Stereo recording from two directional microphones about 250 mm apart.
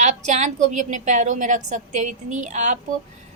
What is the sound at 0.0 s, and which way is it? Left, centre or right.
A woman's voice, right.